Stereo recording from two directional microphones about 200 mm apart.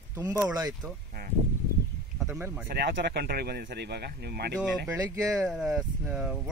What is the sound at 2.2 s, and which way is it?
Speech, 10° right (ahead or behind).